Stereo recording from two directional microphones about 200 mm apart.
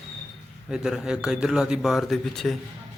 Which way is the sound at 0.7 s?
5° right (ahead or behind).